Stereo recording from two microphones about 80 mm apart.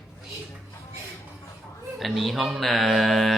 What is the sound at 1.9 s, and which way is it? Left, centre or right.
Speech, centre.